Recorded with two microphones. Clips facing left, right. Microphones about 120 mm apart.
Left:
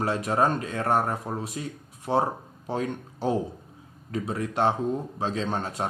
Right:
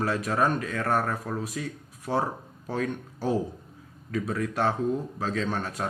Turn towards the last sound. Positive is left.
turn(degrees=25)  # may be behind; listen again after turning